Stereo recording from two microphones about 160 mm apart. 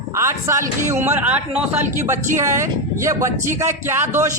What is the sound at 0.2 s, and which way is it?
Speech, 15° right (ahead or behind).